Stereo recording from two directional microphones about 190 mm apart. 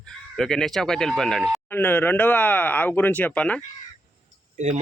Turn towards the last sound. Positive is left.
turn(degrees=-40)  # may be behind; listen again after turning